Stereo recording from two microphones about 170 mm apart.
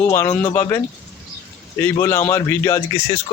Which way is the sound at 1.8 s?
15° left (ahead or behind).